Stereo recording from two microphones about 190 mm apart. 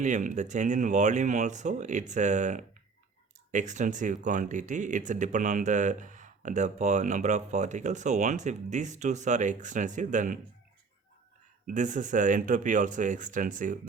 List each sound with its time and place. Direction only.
0.0 s speech: 40° right (ahead or behind)
11.6 s speech: 40° right (ahead or behind)